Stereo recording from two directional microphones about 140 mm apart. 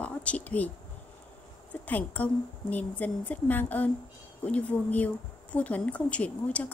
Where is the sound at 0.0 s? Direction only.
10° left (ahead or behind).